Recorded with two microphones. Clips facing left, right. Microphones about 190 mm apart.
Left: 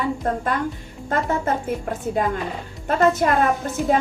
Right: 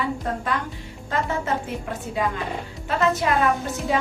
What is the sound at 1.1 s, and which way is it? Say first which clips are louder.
Speech: left 3 dB; 50° left (ahead or behind).